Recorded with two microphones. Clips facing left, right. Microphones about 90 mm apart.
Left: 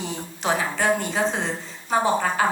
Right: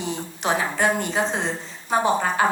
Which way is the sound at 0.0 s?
20° right (ahead or behind).